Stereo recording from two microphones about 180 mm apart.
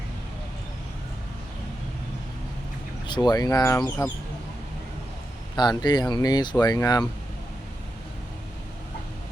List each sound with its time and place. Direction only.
3.2 s speech: 20° left (ahead or behind)
5.5 s speech: 25° left (ahead or behind)